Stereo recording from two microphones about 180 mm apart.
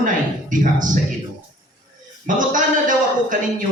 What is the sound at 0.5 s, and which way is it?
Speech, 45° right (ahead or behind).